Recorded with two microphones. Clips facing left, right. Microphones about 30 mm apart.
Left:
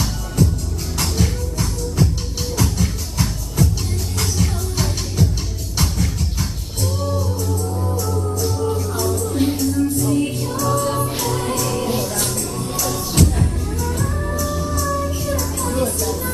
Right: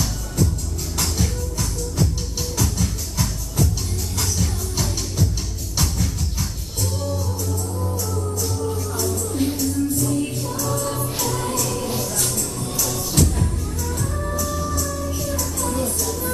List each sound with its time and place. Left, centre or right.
0.4 s music: centre
7.0 s music: centre
10.1 s music: left